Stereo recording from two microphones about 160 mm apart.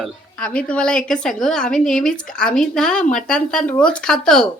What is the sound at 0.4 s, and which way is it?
Speech, 5° left (ahead or behind).